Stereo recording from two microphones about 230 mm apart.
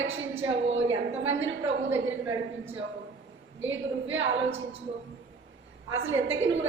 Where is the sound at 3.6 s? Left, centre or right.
Right.